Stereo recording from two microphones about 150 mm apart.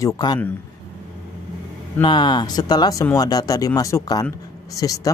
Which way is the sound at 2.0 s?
30° left (ahead or behind).